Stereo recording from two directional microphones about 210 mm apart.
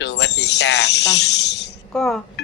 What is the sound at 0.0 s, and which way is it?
Tambourine, 55° left (ahead or behind).